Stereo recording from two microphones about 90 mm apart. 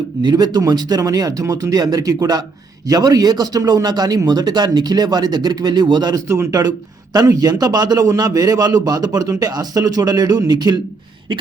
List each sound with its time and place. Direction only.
0.2 s a man's voice: 55° right (ahead or behind)
6.2 s speech: 30° right (ahead or behind)
7.3 s a man's voice: 45° right (ahead or behind)